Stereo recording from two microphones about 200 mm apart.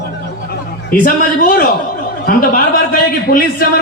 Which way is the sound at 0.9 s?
45° left (ahead or behind).